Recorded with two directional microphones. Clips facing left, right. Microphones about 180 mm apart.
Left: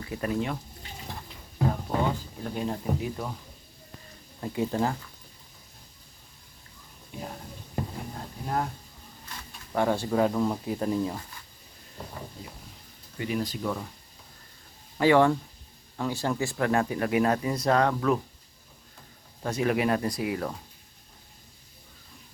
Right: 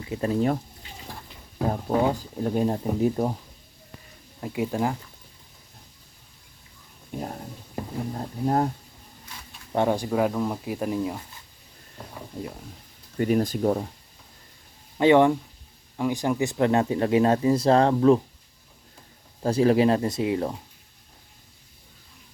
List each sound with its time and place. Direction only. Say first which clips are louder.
0.0 s speech: right 4 dB; 25° right (ahead or behind)
1.6 s speech: right 4 dB; 40° right (ahead or behind)
4.4 s speech: right 1 dB; 10° right (ahead or behind)
7.1 s a sound: right 6 dB; 50° right (ahead or behind)
8.4 s speech: right 7 dB; 35° right (ahead or behind)
9.7 s speech: right 2 dB; 20° right (ahead or behind)
13.1 s speech: right 8 dB; 45° right (ahead or behind)
14.9 s speech: right 3 dB; 20° right (ahead or behind)
19.4 s speech: right 7 dB; 30° right (ahead or behind)